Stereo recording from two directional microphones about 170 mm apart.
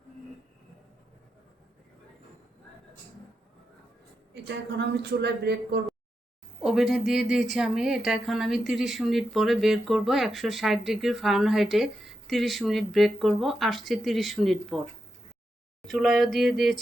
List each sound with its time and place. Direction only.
4.4 s a woman's voice: 90° right; by 5.8 s 75° right (ahead or behind)
6.6 s speech: 5° right (ahead or behind)